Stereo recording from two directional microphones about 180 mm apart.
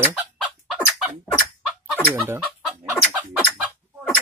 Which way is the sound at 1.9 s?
10° right (ahead or behind).